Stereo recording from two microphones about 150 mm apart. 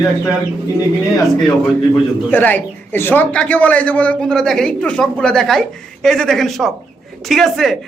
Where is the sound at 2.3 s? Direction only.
10° left (ahead or behind).